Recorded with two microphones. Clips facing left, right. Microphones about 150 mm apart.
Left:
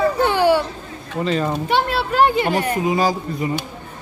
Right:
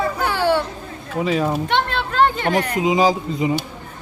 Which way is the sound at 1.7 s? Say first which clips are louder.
Left 3 dB; 5° left (ahead or behind).